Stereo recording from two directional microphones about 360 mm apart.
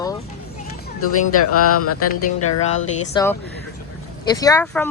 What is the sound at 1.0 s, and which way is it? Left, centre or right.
Speech, left.